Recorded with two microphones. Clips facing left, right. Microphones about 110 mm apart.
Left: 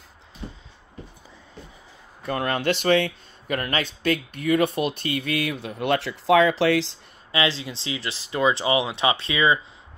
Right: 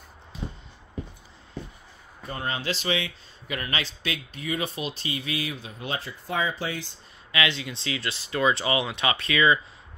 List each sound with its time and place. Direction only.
2.2 s speech: 65° left (ahead or behind); by 7.0 s 90° left
7.3 s speech: 30° left (ahead or behind)